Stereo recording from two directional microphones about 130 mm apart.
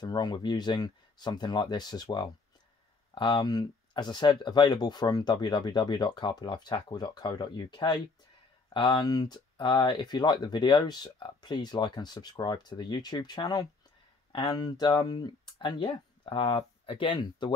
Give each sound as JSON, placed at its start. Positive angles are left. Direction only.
{"t": 0.0, "sound": "speech", "side_deg": 30}